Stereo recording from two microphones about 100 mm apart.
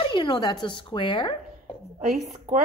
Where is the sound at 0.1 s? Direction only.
50° left (ahead or behind).